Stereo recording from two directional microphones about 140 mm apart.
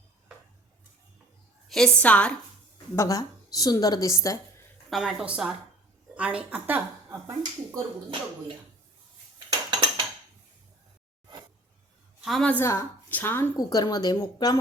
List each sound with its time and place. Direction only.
1.6 s a woman's voice: 5° left (ahead or behind)
2.9 s a woman's voice: 20° left (ahead or behind)
4.9 s a woman's voice: 5° right (ahead or behind); by 7.8 s 20° right (ahead or behind)
9.5 s dishes: 35° right (ahead or behind)
12.2 s a woman's voice: 5° left (ahead or behind)
13.6 s a woman's voice: 25° left (ahead or behind)